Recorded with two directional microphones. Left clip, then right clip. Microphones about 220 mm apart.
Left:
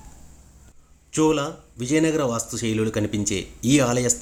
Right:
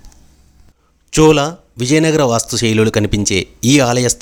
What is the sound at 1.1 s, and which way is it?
Speech, 45° right (ahead or behind).